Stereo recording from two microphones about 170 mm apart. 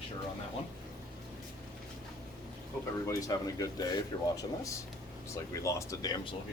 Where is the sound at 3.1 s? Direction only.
20° left (ahead or behind).